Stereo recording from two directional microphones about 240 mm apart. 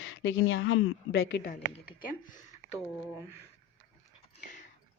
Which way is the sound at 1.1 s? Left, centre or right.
Left.